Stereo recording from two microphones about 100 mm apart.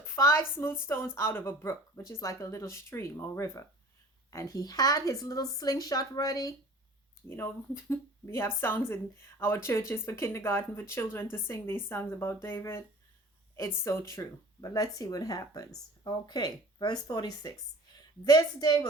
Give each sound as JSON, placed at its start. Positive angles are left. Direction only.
{"t": 0.0, "sound": "speech", "side_deg": 25}
{"t": 7.3, "sound": "speech", "side_deg": 25}
{"t": 14.7, "sound": "speech", "side_deg": 40}